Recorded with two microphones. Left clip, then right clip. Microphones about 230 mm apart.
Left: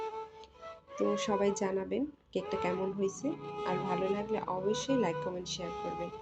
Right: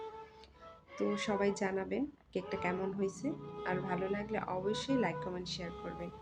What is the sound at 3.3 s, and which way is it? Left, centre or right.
Speech, left.